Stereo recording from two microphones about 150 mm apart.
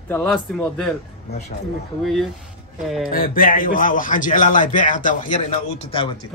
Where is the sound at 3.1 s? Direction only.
70° left (ahead or behind).